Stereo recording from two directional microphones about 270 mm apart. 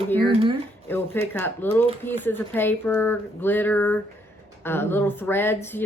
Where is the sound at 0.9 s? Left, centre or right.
Centre.